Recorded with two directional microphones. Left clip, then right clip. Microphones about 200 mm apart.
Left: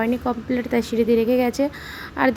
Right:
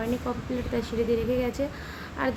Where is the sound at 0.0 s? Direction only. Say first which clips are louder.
Left 7 dB; 40° left (ahead or behind).